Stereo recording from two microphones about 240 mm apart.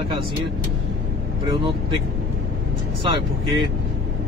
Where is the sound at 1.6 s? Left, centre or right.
Right.